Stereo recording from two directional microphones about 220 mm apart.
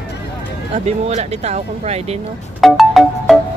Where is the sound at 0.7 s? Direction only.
30° right (ahead or behind).